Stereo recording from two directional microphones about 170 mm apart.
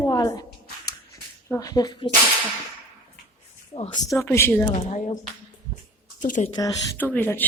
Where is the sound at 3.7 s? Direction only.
30° left (ahead or behind).